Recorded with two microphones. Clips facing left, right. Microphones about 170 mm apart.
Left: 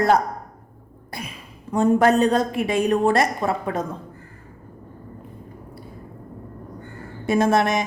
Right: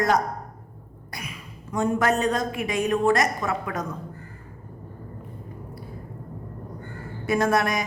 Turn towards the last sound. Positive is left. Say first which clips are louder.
# left 4 dB
turn(degrees=25)  # may be behind; listen again after turning